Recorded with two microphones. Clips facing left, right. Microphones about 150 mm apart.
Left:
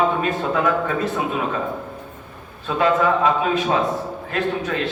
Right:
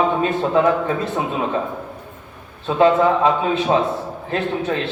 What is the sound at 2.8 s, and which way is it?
A man's voice, 25° right (ahead or behind).